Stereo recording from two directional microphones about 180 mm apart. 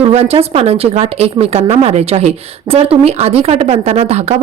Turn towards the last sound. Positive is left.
turn(degrees=-35)  # may be behind; listen again after turning